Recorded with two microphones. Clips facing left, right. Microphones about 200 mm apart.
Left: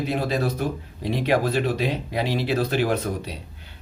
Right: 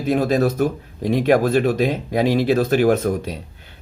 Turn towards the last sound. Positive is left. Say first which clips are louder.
# right 7 dB
turn(degrees=-45)  # may be behind; listen again after turning